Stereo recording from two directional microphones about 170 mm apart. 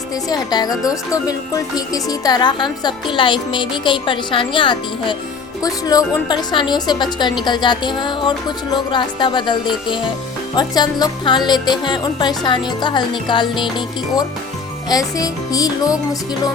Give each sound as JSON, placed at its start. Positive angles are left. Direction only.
{"t": 0.3, "sound": "a woman's voice", "side_deg": 25}